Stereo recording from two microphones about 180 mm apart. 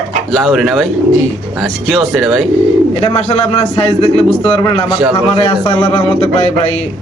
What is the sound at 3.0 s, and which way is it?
A man's voice, 35° left (ahead or behind).